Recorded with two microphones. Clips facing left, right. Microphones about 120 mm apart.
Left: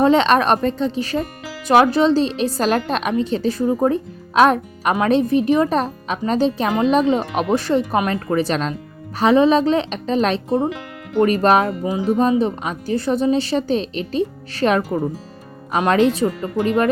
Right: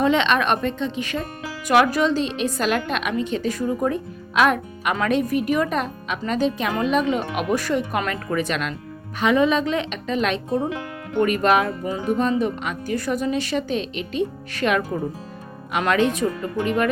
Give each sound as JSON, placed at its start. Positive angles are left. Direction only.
{"t": 0.0, "sound": "a woman's voice", "side_deg": 35}
{"t": 15.9, "sound": "a woman's voice", "side_deg": 30}